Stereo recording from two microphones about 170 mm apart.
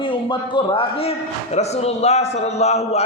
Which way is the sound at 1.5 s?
40° left (ahead or behind).